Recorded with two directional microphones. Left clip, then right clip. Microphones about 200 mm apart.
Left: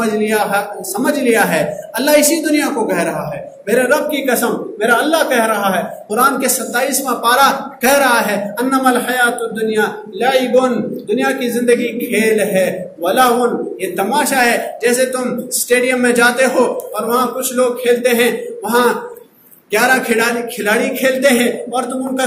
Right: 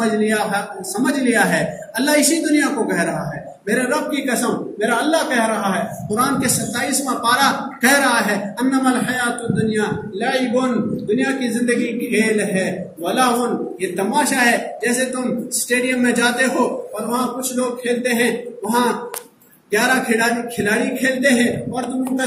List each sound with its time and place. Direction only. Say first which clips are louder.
0.0 s a man's voice: left 3 dB; 20° right (ahead or behind)